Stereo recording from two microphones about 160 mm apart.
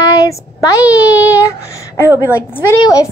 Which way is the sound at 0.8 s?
10° right (ahead or behind).